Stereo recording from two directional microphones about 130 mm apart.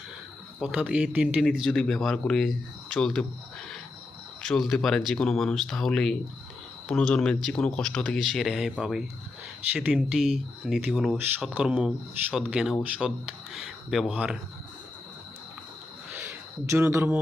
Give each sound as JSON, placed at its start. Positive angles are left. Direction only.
{"t": 0.6, "sound": "speech", "side_deg": -5}
{"t": 4.4, "sound": "speech", "side_deg": 5}
{"t": 16.1, "sound": "a sound", "side_deg": -15}